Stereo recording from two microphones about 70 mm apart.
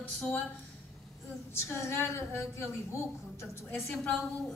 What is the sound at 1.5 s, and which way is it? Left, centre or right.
A woman's voice, left.